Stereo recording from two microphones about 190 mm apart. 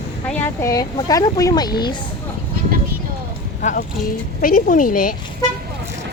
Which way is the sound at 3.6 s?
50° left (ahead or behind).